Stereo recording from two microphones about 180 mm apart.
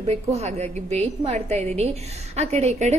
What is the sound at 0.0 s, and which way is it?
A woman's voice, 35° right (ahead or behind).